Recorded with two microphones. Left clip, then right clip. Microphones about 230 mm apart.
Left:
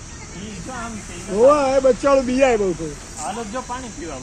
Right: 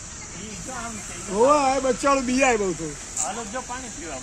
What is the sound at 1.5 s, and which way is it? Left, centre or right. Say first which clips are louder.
Speech: left 4 dB; right.